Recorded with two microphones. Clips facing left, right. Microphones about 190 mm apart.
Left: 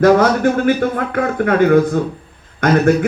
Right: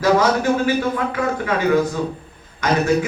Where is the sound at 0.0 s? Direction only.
55° left (ahead or behind).